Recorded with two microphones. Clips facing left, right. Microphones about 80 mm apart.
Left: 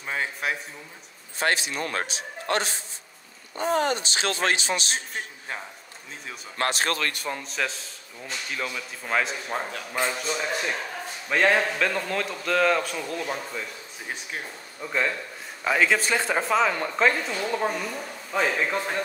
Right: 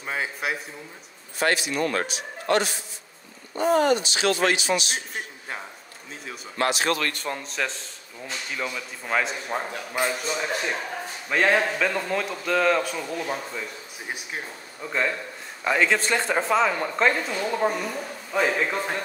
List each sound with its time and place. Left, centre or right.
0.0 s a man's voice: centre
1.4 s speech: left
3.8 s speech: left
6.6 s speech: left
7.2 s a man's voice: centre